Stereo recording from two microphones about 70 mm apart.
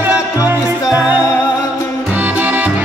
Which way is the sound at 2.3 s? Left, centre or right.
Right.